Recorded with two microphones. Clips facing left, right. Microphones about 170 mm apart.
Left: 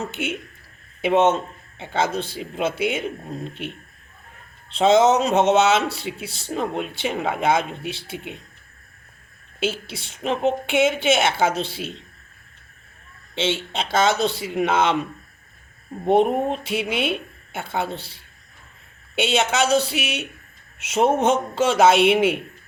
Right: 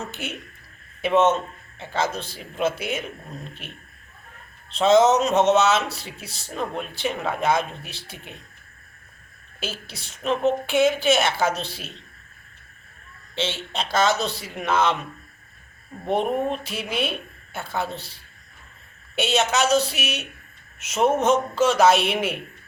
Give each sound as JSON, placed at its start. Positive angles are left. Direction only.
{"t": 1.0, "sound": "a man's voice", "side_deg": 30}
{"t": 4.7, "sound": "a man's voice", "side_deg": 30}
{"t": 9.6, "sound": "a man's voice", "side_deg": 25}
{"t": 13.3, "sound": "a man's voice", "side_deg": 25}
{"t": 16.0, "sound": "a man's voice", "side_deg": 30}
{"t": 19.1, "sound": "a man's voice", "side_deg": 25}